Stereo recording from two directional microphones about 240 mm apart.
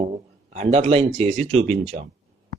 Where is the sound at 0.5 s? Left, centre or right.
Right.